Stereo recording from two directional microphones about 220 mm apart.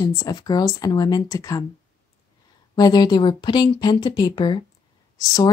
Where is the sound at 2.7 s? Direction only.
20° left (ahead or behind).